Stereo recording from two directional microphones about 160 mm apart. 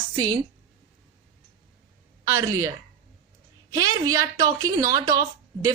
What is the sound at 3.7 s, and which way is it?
A woman's voice, 20° right (ahead or behind).